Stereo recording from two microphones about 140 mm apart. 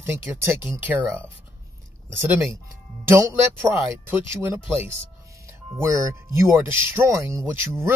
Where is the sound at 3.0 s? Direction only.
15° right (ahead or behind).